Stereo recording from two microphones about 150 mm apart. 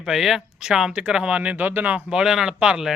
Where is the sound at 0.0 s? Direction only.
Centre (ahead or behind).